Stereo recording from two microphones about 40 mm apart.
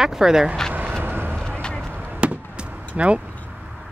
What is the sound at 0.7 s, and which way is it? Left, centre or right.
Vehicle, right.